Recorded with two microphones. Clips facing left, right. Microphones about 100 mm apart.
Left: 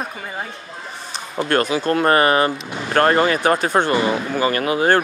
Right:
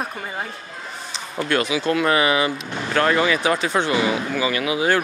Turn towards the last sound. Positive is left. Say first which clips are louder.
# left 3 dB
turn(degrees=45)  # may be behind; listen again after turning